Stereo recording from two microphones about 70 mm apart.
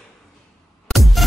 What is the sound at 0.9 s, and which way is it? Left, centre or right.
Music, centre.